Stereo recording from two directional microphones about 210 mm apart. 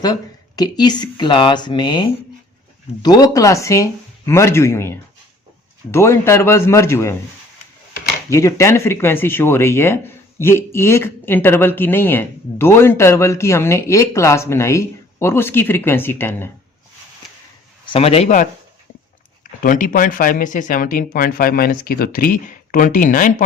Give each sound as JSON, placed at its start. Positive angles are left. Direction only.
{"t": 0.0, "sound": "speech", "side_deg": 20}
{"t": 8.3, "sound": "speech", "side_deg": 15}
{"t": 17.8, "sound": "speech", "side_deg": 25}
{"t": 19.6, "sound": "speech", "side_deg": 40}